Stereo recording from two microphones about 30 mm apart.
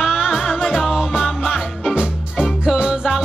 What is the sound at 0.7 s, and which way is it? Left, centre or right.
Music, centre.